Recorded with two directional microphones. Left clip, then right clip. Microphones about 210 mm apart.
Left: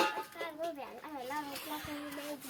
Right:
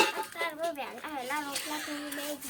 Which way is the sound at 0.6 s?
10° left (ahead or behind).